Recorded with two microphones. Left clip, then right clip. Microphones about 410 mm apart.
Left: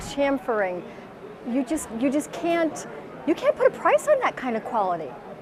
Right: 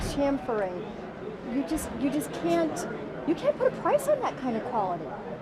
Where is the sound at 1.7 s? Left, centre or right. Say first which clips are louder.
Left 5 dB; left.